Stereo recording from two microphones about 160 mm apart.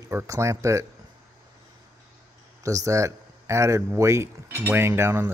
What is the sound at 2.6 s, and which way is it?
A man's voice, 20° right (ahead or behind).